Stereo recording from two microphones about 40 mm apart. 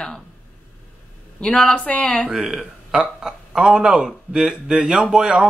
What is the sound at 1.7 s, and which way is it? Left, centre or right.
Speech, left.